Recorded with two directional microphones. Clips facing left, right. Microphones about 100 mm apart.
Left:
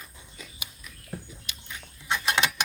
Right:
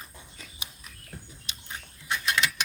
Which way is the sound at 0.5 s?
35° right (ahead or behind).